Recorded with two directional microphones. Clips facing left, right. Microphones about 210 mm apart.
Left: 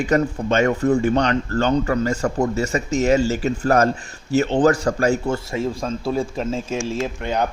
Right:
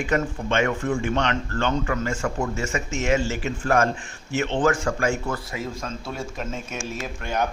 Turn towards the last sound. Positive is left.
turn(degrees=30)  # may be behind; listen again after turning